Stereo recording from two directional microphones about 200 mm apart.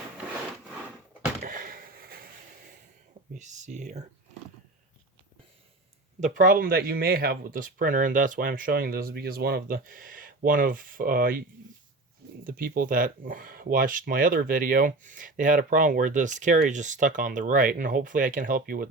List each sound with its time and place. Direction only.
1.4 s a sound: 45° right (ahead or behind)
3.3 s speech: 35° right (ahead or behind)
6.1 s speech: 40° right (ahead or behind)
12.5 s speech: 45° right (ahead or behind)